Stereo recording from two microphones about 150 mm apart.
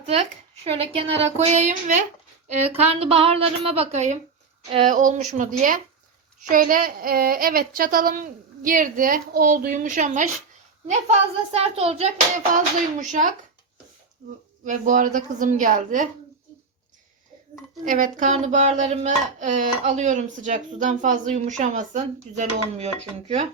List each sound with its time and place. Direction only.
0.0 s a woman's voice: 40° right (ahead or behind); by 10.2 s 55° right (ahead or behind)
11.5 s speech: 45° right (ahead or behind)
12.5 s speech: 55° right (ahead or behind)
14.6 s speech: 60° right (ahead or behind)
17.8 s speech: 60° right (ahead or behind)